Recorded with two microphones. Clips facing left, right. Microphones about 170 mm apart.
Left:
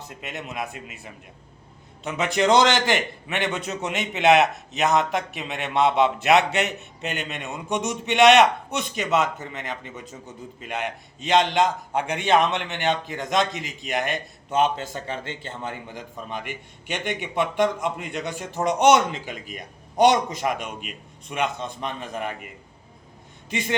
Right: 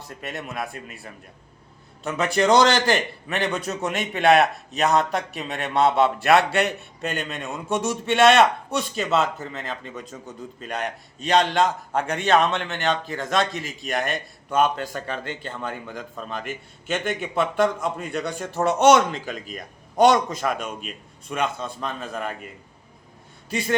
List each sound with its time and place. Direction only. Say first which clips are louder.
0.1 s a man's voice: right 3 dB; 20° left (ahead or behind)
10.6 s a man's voice: even; 20° left (ahead or behind)